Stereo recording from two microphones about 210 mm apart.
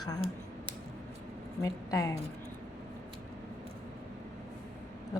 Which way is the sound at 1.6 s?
15° left (ahead or behind).